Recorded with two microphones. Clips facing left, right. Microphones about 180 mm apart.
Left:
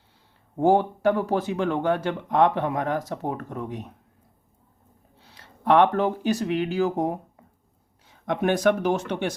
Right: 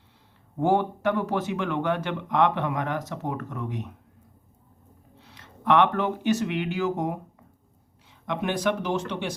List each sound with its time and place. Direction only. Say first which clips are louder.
0.6 s speech: left 3 dB; 35° left (ahead or behind)
5.2 s speech: left 2 dB; 35° left (ahead or behind)
8.3 s speech: left 5 dB; 45° left (ahead or behind)